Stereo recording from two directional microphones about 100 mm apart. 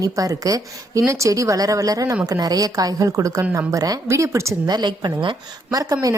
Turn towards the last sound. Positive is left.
turn(degrees=-35)  # may be behind; listen again after turning